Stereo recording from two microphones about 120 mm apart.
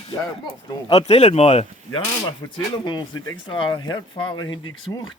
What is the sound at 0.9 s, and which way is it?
Speech, 65° left (ahead or behind).